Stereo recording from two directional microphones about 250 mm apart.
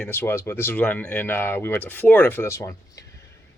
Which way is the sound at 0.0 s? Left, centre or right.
Centre.